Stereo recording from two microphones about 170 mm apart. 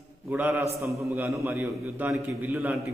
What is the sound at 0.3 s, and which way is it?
A man's voice, 10° right (ahead or behind).